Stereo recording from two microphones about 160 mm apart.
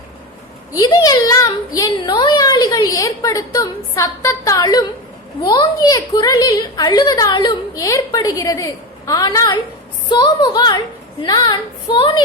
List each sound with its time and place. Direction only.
0.7 s speech: 25° left (ahead or behind)